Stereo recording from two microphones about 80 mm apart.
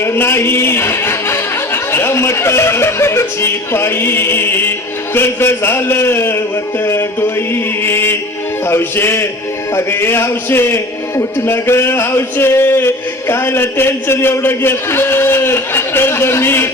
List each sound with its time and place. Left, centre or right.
0.0 s a man's voice: left
6.8 s mantra: left
8.6 s speech: left
11.2 s a sound: left